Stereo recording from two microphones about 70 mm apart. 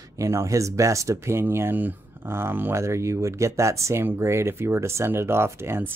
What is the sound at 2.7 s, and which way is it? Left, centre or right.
Speech, right.